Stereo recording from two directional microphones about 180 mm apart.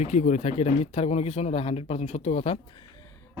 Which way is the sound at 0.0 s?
40° left (ahead or behind).